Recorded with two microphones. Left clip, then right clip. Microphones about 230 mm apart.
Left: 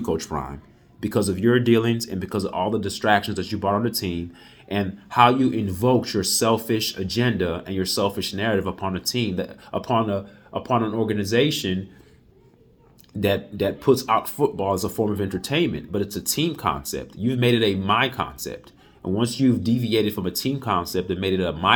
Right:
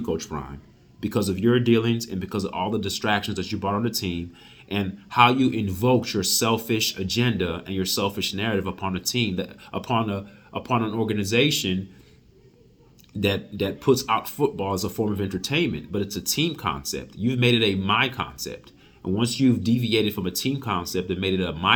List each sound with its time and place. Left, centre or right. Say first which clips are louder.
0.0 s speech: left 3 dB; centre
13.3 s speech: left 4 dB; centre